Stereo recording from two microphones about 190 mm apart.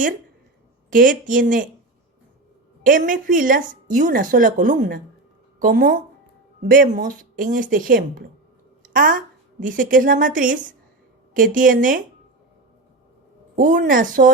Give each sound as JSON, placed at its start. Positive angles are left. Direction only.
{"t": 0.9, "sound": "speech", "side_deg": -45}
{"t": 2.8, "sound": "a woman's voice", "side_deg": -45}
{"t": 13.6, "sound": "speech", "side_deg": -45}